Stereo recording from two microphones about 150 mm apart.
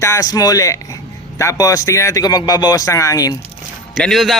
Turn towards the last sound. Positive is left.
turn(degrees=0)  # may be behind; listen again after turning